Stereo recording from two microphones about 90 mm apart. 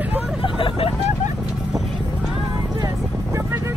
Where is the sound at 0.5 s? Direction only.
80° left.